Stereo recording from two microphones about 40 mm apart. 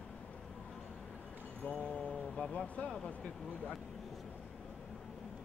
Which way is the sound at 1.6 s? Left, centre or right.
Left.